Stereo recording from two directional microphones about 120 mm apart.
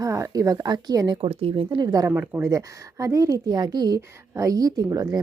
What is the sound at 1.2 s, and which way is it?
Speech, 50° right (ahead or behind).